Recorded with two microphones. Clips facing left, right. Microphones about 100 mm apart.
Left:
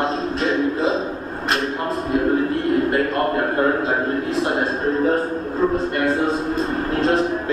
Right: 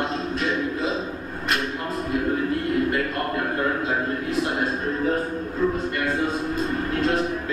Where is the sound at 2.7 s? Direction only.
40° left (ahead or behind).